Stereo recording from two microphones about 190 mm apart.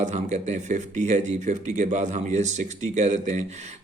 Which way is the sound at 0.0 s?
40° right (ahead or behind).